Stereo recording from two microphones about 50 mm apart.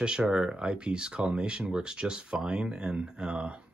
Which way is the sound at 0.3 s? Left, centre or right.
Centre.